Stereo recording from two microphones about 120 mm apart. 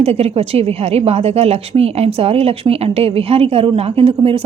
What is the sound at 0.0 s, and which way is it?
A woman's voice, 60° right (ahead or behind).